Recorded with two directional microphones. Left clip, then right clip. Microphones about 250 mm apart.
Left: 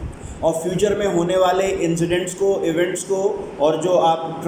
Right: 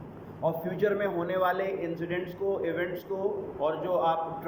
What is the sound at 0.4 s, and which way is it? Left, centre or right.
A man's voice, centre.